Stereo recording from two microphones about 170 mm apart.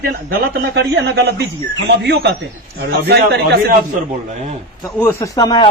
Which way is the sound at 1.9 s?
75° right (ahead or behind).